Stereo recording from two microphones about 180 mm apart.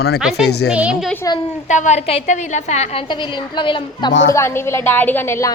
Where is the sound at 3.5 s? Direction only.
25° left (ahead or behind).